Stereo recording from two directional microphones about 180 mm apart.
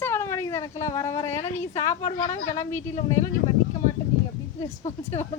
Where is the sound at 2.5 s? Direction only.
15° left (ahead or behind).